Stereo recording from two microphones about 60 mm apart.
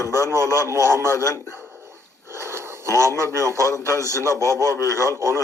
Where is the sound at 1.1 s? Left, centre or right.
Left.